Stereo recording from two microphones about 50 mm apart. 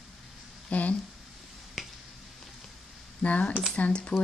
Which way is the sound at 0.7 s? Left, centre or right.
Left.